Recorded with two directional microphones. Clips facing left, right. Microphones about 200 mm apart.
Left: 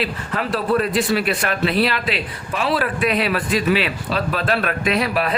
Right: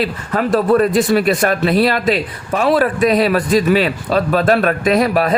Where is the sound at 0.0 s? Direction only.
45° right (ahead or behind).